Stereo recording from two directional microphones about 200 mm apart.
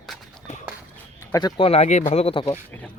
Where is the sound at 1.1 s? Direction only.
20° left (ahead or behind).